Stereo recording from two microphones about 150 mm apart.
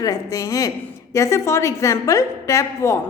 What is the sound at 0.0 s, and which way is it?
A woman's voice, 25° left (ahead or behind).